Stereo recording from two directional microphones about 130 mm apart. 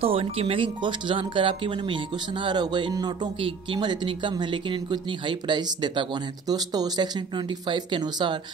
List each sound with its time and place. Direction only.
0.0 s speech: 50° right (ahead or behind)